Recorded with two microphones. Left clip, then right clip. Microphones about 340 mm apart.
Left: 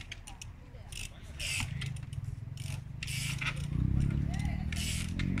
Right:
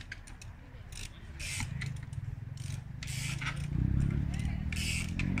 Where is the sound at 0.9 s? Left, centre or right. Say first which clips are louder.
Left 3 dB; centre.